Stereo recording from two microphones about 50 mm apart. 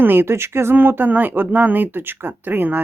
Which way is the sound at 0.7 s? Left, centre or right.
Right.